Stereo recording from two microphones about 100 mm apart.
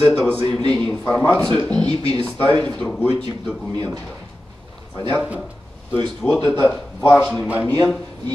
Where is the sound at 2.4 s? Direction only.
15° left (ahead or behind).